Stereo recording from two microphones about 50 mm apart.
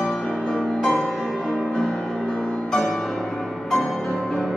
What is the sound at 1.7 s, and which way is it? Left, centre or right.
Music, centre.